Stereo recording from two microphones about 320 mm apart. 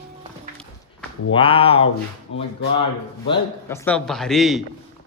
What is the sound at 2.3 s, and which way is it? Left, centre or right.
Speech, left.